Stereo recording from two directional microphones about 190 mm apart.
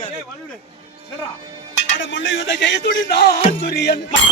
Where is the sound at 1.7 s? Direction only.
75° left (ahead or behind).